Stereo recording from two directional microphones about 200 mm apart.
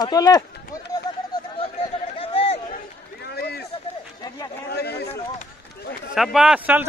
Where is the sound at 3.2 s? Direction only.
55° left (ahead or behind).